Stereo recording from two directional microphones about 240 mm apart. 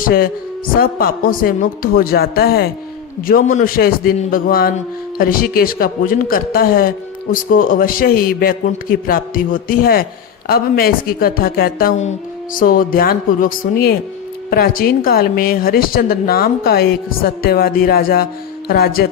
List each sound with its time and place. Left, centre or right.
0.0 s speech: left